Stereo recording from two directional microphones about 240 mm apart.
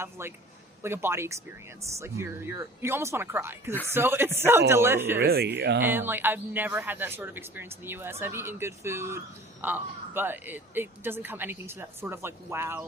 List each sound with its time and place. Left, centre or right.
0.0 s speech: centre
5.2 s speech: right
5.8 s speech: centre